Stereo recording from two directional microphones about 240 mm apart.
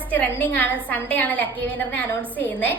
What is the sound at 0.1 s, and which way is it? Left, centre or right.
A woman's voice, centre.